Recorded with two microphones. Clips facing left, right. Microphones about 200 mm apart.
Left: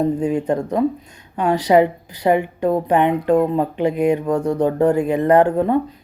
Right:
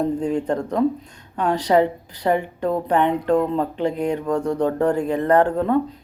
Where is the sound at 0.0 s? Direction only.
10° left (ahead or behind).